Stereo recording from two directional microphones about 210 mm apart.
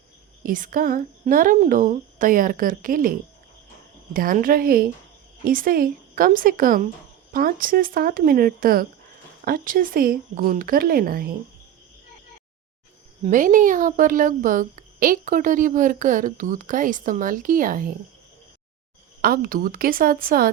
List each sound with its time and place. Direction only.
0.4 s a woman's voice: 40° right (ahead or behind)
4.1 s a woman's voice: 40° right (ahead or behind)
13.2 s a woman's voice: 40° right (ahead or behind)
19.2 s a woman's voice: 45° right (ahead or behind)